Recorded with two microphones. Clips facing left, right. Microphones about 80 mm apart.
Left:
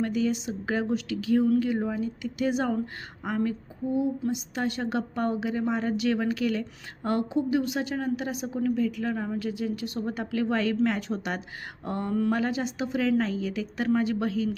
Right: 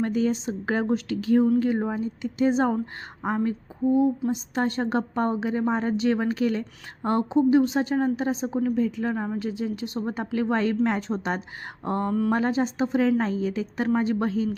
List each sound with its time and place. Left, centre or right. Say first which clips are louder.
0.0 s a woman's voice: right 2 dB; right